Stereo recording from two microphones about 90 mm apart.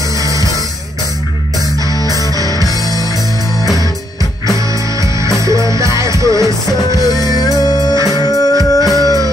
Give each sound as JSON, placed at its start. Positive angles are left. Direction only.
{"t": 0.2, "sound": "music", "side_deg": -40}
{"t": 2.7, "sound": "music", "side_deg": 45}
{"t": 5.4, "sound": "music", "side_deg": -35}
{"t": 6.4, "sound": "music", "side_deg": 45}